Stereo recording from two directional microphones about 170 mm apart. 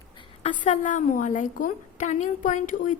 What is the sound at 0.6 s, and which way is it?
A woman's voice, 50° left (ahead or behind).